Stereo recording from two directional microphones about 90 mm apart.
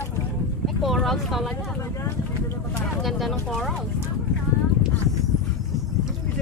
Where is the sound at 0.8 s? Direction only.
Centre (ahead or behind).